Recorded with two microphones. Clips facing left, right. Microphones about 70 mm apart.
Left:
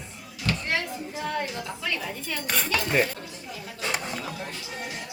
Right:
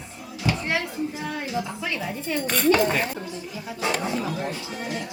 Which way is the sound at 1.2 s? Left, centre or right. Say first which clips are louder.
Left 2 dB; centre.